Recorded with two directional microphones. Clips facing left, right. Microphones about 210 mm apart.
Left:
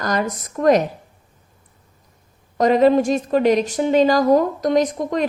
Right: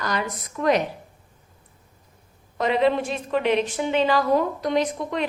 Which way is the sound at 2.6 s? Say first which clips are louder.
Left 7 dB; 40° left (ahead or behind).